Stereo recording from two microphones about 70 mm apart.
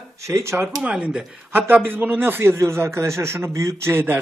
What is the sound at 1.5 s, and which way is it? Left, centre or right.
A man's voice, right.